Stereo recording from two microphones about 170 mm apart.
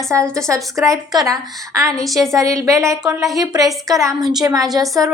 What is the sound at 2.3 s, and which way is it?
A woman's voice, 20° right (ahead or behind).